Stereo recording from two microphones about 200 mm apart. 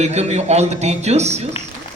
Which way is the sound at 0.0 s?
35° right (ahead or behind).